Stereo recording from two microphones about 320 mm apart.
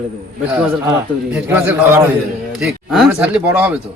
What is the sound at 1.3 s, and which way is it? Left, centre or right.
A man's voice, centre.